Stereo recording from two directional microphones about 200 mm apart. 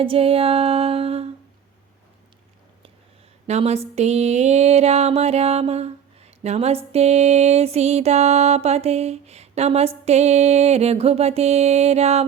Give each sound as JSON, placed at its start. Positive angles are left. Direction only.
{"t": 0.0, "sound": "music", "side_deg": -30}
{"t": 3.4, "sound": "speech", "side_deg": -30}